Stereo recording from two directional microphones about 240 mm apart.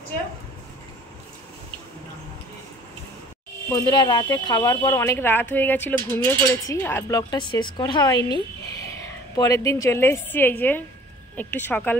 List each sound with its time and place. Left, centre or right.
3.7 s a woman's voice: centre